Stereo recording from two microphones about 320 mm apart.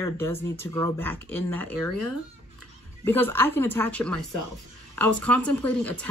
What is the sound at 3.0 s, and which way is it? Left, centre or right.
Speech, centre.